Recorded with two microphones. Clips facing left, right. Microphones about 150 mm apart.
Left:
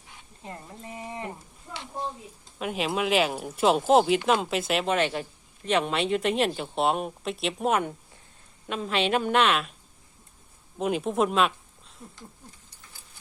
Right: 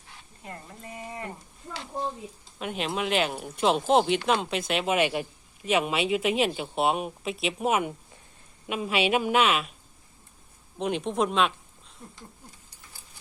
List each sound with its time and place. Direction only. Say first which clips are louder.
0.1 s speech: left 1 dB; 15° left (ahead or behind)
1.9 s speech: right 2 dB; centre (ahead or behind)
4.9 s a woman's voice: right 1 dB; 10° right (ahead or behind)
10.8 s speech: left 2 dB; 5° left (ahead or behind)